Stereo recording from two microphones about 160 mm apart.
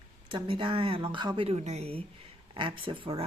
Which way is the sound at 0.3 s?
30° right (ahead or behind).